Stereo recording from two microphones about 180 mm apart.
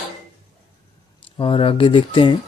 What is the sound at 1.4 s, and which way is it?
Speech, 30° left (ahead or behind).